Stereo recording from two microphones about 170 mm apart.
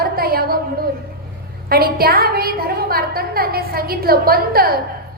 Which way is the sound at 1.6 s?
60° right (ahead or behind).